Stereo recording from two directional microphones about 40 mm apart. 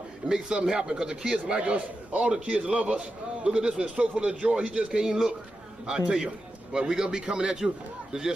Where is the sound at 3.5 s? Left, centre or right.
Right.